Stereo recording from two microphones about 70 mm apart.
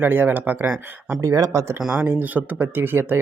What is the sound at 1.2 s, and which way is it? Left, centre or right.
Speech, right.